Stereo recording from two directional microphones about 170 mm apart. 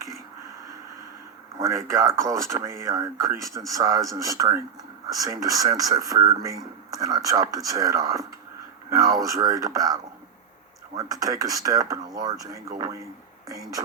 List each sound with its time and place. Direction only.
1.5 s speech: 20° right (ahead or behind)